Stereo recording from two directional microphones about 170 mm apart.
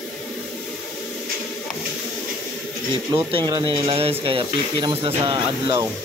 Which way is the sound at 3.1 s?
30° right (ahead or behind).